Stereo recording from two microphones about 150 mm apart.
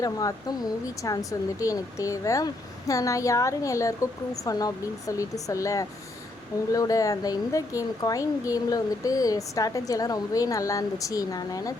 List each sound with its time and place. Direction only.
0.0 s speech: 25° left (ahead or behind)